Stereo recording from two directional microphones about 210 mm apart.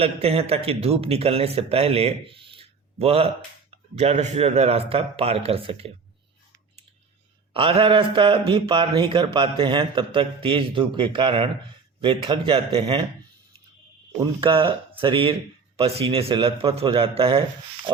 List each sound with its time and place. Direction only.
0.0 s a man's voice: 30° right (ahead or behind)
7.5 s a man's voice: 25° right (ahead or behind)
14.2 s a man's voice: 25° right (ahead or behind)